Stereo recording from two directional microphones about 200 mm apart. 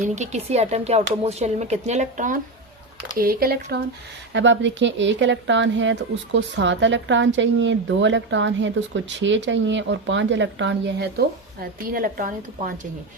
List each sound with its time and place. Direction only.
0.0 s speech: 35° right (ahead or behind); by 3.8 s 50° right (ahead or behind)
4.3 s speech: 65° right (ahead or behind)
11.9 s speech: 45° right (ahead or behind)